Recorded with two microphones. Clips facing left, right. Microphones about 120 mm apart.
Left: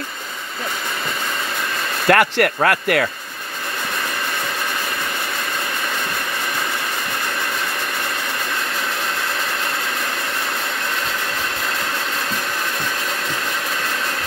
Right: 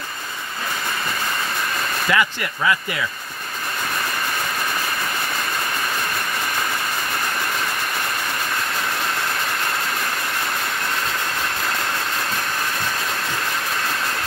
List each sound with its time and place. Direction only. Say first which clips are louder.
2.0 s speech: left 8 dB; 60° left (ahead or behind)